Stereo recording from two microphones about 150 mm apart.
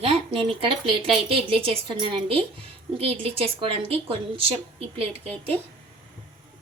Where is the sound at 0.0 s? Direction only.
40° right (ahead or behind).